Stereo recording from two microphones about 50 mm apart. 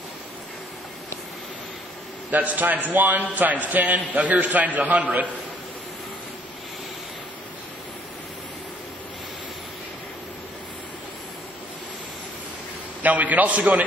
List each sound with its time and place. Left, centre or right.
2.3 s a man's voice: right
13.0 s a man's voice: right